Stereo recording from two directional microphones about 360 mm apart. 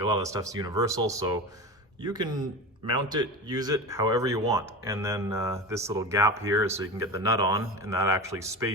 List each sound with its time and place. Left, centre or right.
0.0 s speech: centre